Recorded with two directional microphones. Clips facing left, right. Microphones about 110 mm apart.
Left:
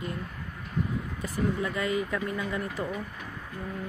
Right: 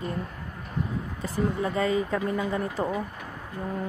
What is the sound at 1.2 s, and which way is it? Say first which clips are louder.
Speech: right 2 dB; 30° right (ahead or behind).